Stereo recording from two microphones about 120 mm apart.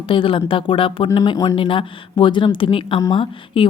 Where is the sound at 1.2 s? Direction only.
35° left (ahead or behind).